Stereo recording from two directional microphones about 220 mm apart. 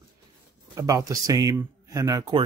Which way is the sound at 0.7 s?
15° right (ahead or behind).